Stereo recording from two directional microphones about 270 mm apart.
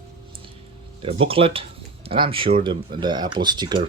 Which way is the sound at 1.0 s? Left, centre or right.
Right.